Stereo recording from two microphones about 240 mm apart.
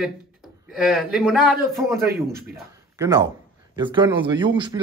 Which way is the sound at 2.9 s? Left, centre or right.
Centre.